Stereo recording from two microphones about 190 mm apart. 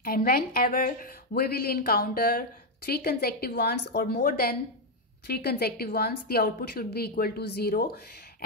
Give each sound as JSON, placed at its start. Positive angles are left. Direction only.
{"t": 0.0, "sound": "a woman's voice", "side_deg": 50}